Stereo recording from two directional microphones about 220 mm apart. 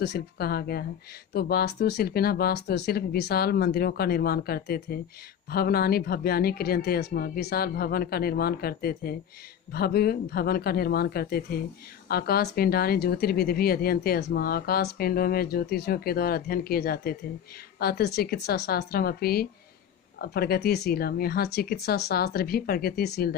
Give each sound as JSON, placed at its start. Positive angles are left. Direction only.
{"t": 0.0, "sound": "speech", "side_deg": 45}